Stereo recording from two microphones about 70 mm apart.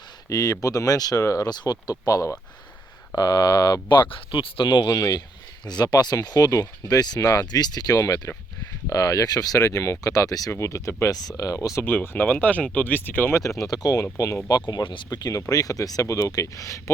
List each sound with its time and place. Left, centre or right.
0.3 s speech: left
1.2 s speech: left
1.5 s speech: left
3.2 s speech: left
4.8 s speech: left
10.1 s speech: left
10.5 s speech: left
11.8 s speech: left
13.6 s speech: left
14.4 s speech: left